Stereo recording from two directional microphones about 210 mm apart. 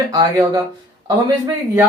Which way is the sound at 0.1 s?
20° right (ahead or behind).